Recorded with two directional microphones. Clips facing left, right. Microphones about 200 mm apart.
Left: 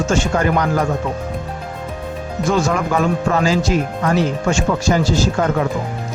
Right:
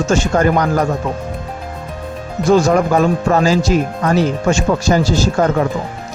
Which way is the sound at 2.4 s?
40° right (ahead or behind).